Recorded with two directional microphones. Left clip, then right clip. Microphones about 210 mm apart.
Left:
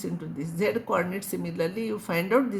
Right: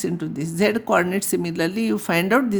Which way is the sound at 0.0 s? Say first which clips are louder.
Right 8 dB; 55° right (ahead or behind).